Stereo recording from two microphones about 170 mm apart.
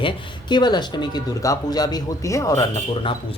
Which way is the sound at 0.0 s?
25° left (ahead or behind).